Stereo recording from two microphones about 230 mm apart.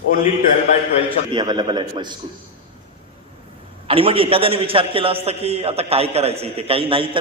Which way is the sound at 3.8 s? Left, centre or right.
Right.